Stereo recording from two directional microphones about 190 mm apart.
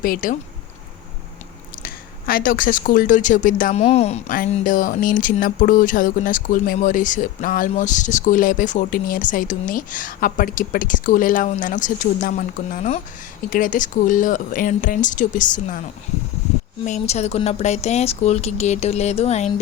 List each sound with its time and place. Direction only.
0.0 s speech: 45° left (ahead or behind)
1.8 s speech: 50° left (ahead or behind); by 4.2 s 35° left (ahead or behind)
4.3 s speech: 45° left (ahead or behind)
16.8 s speech: 35° left (ahead or behind)